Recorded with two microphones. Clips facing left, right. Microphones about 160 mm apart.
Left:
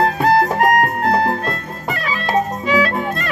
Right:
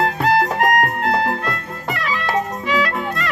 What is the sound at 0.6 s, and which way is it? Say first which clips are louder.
Music: left 2 dB; 25° left (ahead or behind).